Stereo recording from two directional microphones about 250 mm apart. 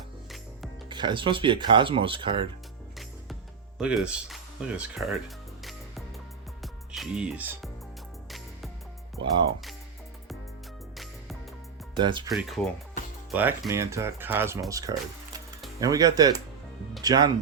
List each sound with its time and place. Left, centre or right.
0.9 s speech: centre
3.8 s speech: centre
6.6 s music: centre
10.9 s music: centre
11.9 s speech: centre
12.3 s speech: centre